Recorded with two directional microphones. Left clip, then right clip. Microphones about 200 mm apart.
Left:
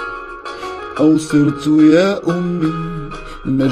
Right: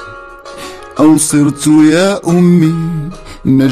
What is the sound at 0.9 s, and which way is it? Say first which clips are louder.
Music: right 4 dB; 30° right (ahead or behind).